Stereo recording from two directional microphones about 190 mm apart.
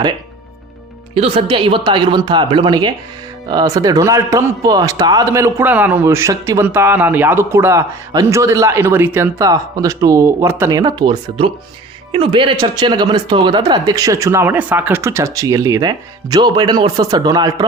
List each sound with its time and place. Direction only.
1.1 s a man's voice: 30° right (ahead or behind)